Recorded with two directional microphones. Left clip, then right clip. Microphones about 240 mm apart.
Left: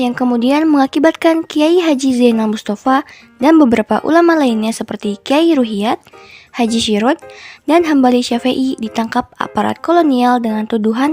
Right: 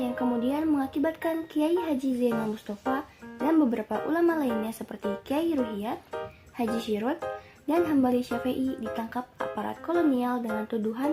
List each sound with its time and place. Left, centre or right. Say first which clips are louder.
0.0 s speech: left 13 dB; left